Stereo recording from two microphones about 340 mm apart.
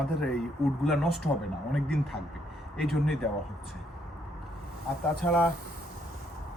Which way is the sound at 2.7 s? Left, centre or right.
Centre.